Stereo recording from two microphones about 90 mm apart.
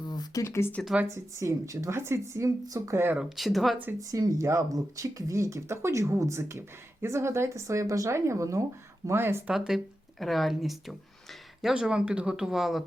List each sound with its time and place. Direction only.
0.0 s a sound: 50° left (ahead or behind)
0.4 s speech: 30° left (ahead or behind)
1.0 s speech: 35° right (ahead or behind)
3.2 s speech: 5° right (ahead or behind)
4.1 s speech: 35° right (ahead or behind)
9.5 s speech: 5° right (ahead or behind)